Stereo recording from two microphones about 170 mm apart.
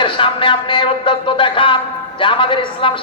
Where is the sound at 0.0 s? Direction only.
30° left (ahead or behind).